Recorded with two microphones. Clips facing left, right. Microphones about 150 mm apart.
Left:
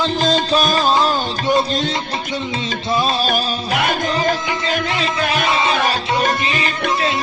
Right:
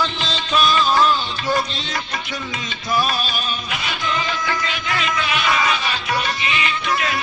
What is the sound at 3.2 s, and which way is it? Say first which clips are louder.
Music: left 7 dB; 45° left (ahead or behind).